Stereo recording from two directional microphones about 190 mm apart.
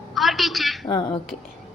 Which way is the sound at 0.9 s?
25° left (ahead or behind).